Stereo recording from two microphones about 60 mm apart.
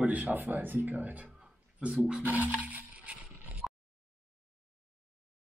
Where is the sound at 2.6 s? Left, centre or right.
Right.